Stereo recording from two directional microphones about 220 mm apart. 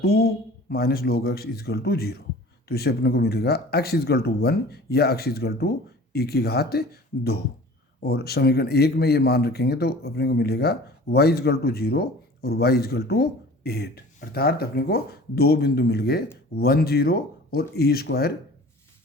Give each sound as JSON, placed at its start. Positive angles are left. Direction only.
{"t": 0.0, "sound": "speech", "side_deg": 45}